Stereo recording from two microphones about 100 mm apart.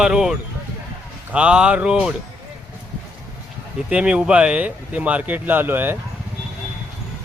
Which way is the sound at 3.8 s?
10° right (ahead or behind).